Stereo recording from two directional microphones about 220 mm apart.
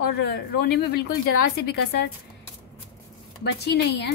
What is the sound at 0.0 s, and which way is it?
A woman's voice, 50° left (ahead or behind).